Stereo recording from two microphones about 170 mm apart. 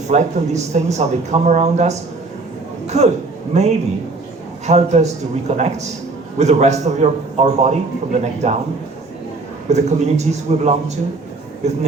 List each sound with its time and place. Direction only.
0.1 s a man's voice: 45° right (ahead or behind)
9.6 s speech: 40° right (ahead or behind)